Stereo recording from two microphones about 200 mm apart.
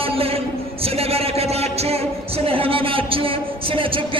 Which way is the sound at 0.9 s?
30° right (ahead or behind).